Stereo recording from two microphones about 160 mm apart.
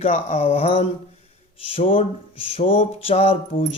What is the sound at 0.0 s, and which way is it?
Speech, 45° left (ahead or behind).